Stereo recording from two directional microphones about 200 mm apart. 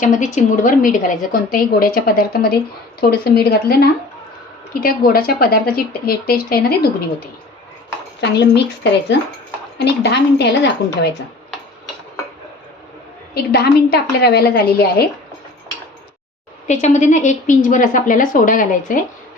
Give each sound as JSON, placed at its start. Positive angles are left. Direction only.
{"t": 0.0, "sound": "a woman's voice", "side_deg": 40}
{"t": 8.4, "sound": "a woman's voice", "side_deg": 60}
{"t": 13.3, "sound": "a woman's voice", "side_deg": 50}
{"t": 16.6, "sound": "a woman's voice", "side_deg": 35}